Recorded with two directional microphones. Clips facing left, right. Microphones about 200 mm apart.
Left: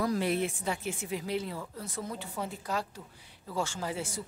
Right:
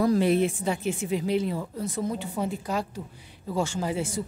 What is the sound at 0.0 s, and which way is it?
A woman's voice, 25° right (ahead or behind).